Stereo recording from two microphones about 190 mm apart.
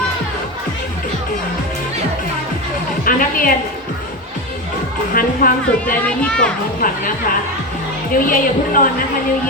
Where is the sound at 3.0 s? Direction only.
50° left (ahead or behind).